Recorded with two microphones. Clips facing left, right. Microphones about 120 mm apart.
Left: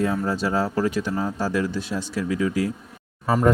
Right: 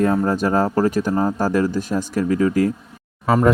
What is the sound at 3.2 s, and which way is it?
Speech, 90° right.